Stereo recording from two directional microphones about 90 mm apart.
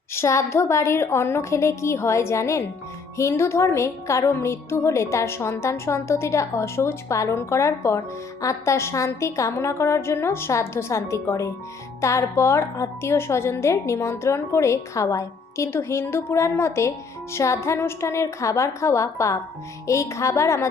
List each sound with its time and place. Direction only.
0.1 s a woman's voice: 30° left (ahead or behind)